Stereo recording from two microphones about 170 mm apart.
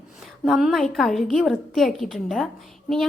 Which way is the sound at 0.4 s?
Centre (ahead or behind).